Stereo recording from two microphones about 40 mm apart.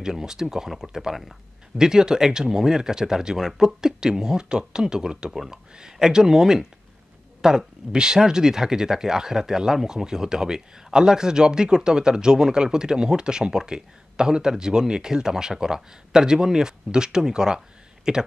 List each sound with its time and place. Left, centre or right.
0.0 s speech: centre